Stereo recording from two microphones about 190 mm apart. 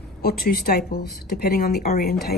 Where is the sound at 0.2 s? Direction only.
55° left (ahead or behind).